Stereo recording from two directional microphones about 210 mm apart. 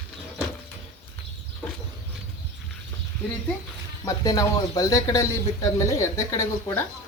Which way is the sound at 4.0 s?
15° left (ahead or behind).